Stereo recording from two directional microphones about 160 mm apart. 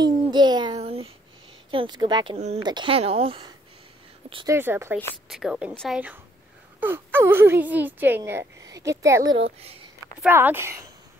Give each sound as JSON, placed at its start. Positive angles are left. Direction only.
{"t": 0.0, "sound": "child singing", "side_deg": -25}
{"t": 0.7, "sound": "a sound", "side_deg": -40}
{"t": 1.7, "sound": "a woman's voice", "side_deg": -30}
{"t": 2.3, "sound": "a woman's voice", "side_deg": -40}
{"t": 2.6, "sound": "a woman's voice", "side_deg": -30}
{"t": 4.5, "sound": "speech", "side_deg": -15}
{"t": 5.3, "sound": "a woman's voice", "side_deg": -5}
{"t": 9.4, "sound": "a woman's voice", "side_deg": -40}
{"t": 10.2, "sound": "speech", "side_deg": -15}